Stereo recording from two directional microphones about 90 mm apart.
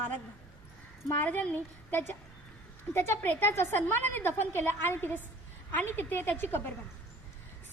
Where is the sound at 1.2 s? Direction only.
20° left (ahead or behind).